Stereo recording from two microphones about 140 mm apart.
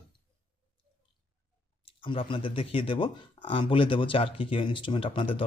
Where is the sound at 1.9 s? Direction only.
40° left (ahead or behind).